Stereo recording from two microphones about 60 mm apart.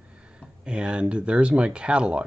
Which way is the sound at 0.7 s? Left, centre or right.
Centre.